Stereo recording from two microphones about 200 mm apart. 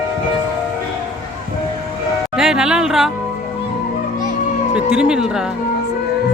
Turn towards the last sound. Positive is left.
turn(degrees=-5)  # may be behind; listen again after turning